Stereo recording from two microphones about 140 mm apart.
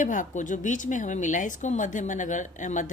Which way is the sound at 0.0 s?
65° left (ahead or behind).